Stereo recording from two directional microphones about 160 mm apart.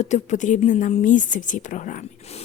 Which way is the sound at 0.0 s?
45° left (ahead or behind).